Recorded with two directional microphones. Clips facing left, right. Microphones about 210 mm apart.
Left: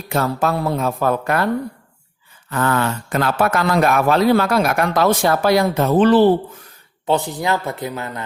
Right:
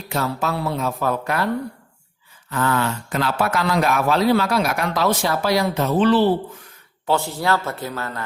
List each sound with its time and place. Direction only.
0.1 s speech: 50° left (ahead or behind)
2.5 s speech: 50° left (ahead or behind)
7.1 s speech: 20° left (ahead or behind)